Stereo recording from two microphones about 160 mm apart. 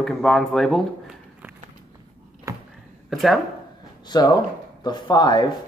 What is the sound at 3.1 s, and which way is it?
Speech, centre (ahead or behind).